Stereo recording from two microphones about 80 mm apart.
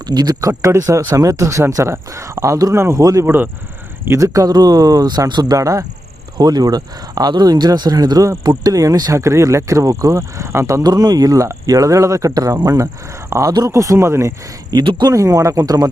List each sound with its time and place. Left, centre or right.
0.1 s speech: right
0.6 s speech: right
2.7 s speech: right
3.2 s speech: right
4.0 s speech: right
5.5 s speech: right
6.3 s speech: right
9.1 s speech: right
10.8 s speech: right
14.7 s speech: right
15.1 s speech: right